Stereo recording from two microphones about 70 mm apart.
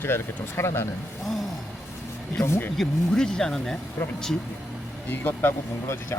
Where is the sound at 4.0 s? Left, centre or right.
Left.